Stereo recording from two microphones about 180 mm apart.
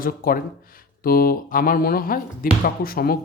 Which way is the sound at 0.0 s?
50° left (ahead or behind).